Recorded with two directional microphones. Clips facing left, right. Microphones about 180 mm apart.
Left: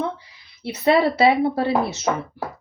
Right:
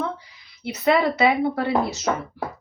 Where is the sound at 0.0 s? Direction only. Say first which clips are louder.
Left 2 dB; 25° left (ahead or behind).